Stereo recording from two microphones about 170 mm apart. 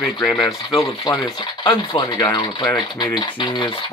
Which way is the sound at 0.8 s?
25° left (ahead or behind).